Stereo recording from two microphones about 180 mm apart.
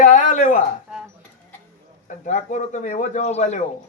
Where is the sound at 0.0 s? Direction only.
40° left (ahead or behind).